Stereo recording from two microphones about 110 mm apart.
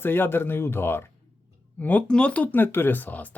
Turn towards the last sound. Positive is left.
turn(degrees=15)  # may be behind; listen again after turning